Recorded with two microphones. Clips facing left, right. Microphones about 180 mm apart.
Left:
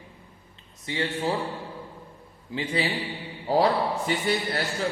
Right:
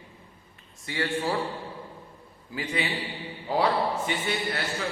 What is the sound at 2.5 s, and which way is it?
A man's voice, 30° left (ahead or behind).